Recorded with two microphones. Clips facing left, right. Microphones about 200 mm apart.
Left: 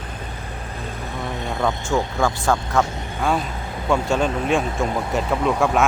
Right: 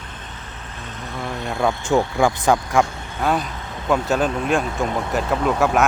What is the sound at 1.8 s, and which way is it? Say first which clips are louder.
Speech: right 3 dB; 15° right (ahead or behind).